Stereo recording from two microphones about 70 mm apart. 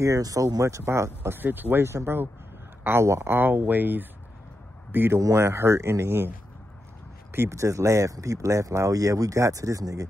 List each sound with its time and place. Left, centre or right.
0.0 s speech: right
3.3 s speech: right
7.3 s speech: right